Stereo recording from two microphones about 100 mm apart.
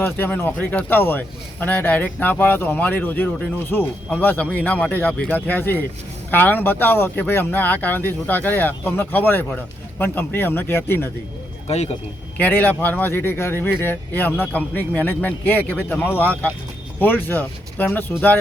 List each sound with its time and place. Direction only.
0.0 s a man's voice: 20° left (ahead or behind)
11.7 s speech: 90° left
12.4 s a man's voice: 20° left (ahead or behind)